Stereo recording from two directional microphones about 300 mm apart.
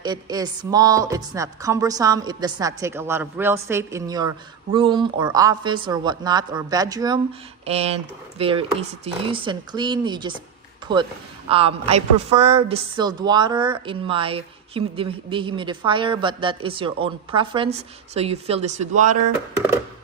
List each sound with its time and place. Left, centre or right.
0.0 s a woman's voice: centre